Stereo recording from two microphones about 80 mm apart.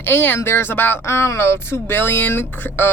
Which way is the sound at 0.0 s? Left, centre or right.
Left.